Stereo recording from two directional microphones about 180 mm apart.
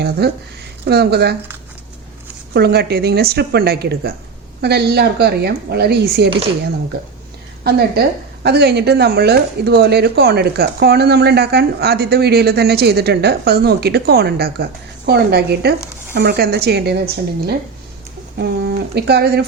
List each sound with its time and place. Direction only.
0.2 s speech: 60° right (ahead or behind)
2.5 s speech: 65° right (ahead or behind)
7.6 s speech: 60° right (ahead or behind)
18.3 s speech: 65° right (ahead or behind)